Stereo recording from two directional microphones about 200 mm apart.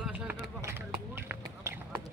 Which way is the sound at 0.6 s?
10° right (ahead or behind).